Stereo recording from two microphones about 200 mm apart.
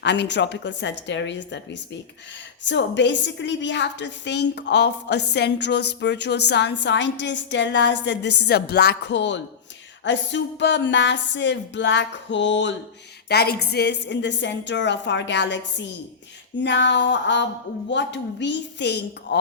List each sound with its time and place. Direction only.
0.0 s a woman's voice: 60° left (ahead or behind)
2.6 s a woman's voice: 60° left (ahead or behind)